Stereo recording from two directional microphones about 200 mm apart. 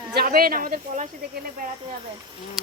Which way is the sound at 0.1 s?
50° right (ahead or behind).